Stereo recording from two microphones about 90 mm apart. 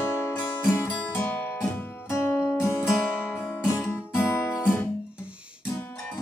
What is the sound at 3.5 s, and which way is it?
Guitar, 30° left (ahead or behind).